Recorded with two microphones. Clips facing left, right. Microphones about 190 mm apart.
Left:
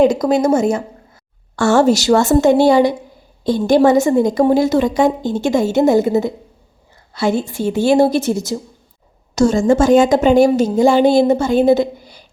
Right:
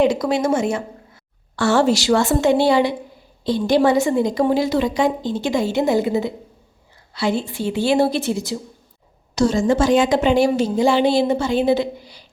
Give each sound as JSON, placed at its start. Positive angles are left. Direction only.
{"t": 0.0, "sound": "a woman's voice", "side_deg": 40}